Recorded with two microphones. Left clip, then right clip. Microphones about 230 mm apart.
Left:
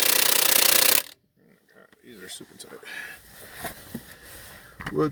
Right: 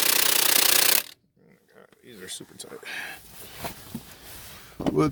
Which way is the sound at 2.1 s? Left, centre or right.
Right.